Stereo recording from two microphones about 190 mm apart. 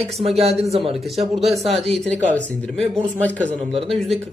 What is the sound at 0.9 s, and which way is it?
A man's voice, centre (ahead or behind).